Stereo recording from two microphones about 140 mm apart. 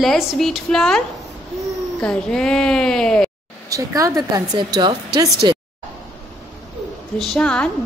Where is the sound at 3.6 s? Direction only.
25° right (ahead or behind).